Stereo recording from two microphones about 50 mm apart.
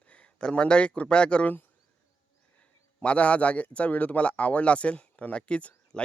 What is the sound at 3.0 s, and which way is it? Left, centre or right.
Speech, left.